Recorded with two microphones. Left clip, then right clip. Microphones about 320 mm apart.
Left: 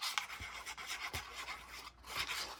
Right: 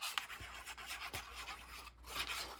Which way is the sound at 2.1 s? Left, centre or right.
Centre.